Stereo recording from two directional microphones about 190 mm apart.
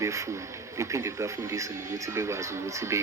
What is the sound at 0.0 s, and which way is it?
Speech, 15° right (ahead or behind).